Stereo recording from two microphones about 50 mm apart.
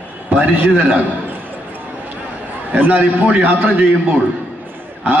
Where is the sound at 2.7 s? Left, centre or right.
Right.